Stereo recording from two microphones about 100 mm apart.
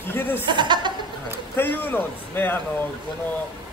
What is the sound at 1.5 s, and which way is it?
A man's voice, 20° left (ahead or behind).